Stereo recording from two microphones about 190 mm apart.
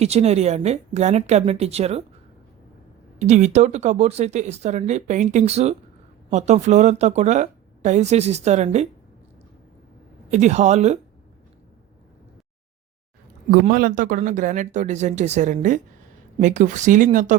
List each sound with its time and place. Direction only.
0.0 s speech: 35° right (ahead or behind)
3.2 s speech: 40° right (ahead or behind)
10.3 s speech: 35° right (ahead or behind)
13.5 s speech: 50° right (ahead or behind)